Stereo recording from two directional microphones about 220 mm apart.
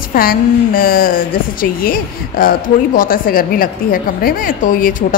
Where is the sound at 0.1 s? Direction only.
40° left (ahead or behind).